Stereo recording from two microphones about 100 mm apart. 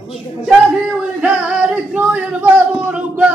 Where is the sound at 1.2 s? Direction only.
10° right (ahead or behind).